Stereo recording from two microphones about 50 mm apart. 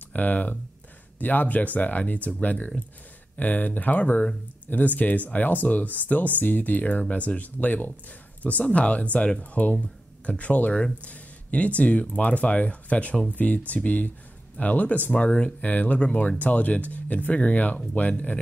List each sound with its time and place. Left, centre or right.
0.1 s speech: left